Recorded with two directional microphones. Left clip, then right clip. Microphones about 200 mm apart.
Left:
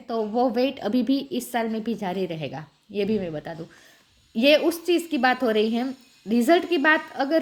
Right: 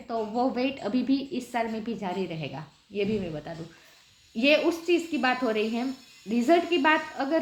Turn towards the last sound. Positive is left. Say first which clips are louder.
# left 3 dB
turn(degrees=45)  # may be behind; listen again after turning